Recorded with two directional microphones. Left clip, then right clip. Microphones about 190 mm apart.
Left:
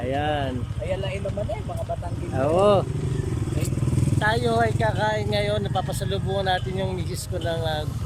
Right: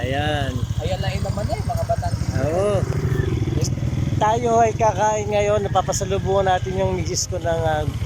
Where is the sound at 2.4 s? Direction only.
15° left (ahead or behind).